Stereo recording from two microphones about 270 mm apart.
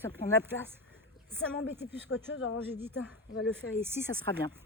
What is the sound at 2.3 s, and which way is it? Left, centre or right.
Speech, left.